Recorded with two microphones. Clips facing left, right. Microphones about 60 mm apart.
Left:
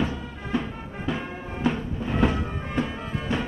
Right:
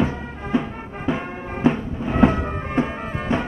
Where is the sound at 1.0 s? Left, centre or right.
Right.